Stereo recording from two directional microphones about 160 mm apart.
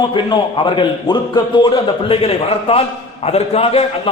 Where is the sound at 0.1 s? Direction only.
30° left (ahead or behind).